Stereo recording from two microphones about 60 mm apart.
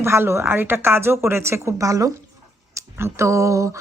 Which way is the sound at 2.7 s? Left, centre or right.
Right.